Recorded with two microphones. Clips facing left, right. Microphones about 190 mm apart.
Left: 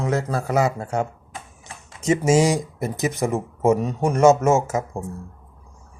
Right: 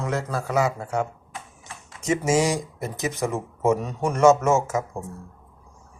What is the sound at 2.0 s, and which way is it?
A man's voice, 20° left (ahead or behind).